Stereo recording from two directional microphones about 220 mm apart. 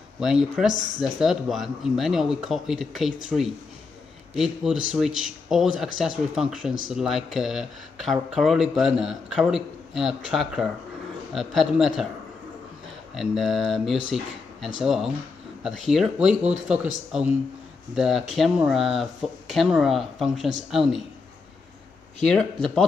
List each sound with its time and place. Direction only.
0.2 s speech: centre (ahead or behind)
13.1 s speech: centre (ahead or behind)
17.9 s speech: centre (ahead or behind)
22.2 s speech: 5° left (ahead or behind)